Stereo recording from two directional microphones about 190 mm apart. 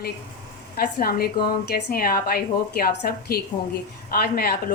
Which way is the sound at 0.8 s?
50° left (ahead or behind).